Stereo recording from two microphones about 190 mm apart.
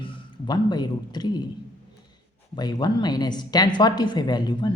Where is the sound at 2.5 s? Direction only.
20° left (ahead or behind).